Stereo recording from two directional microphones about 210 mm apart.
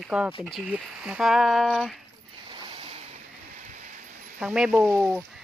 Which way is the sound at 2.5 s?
25° right (ahead or behind).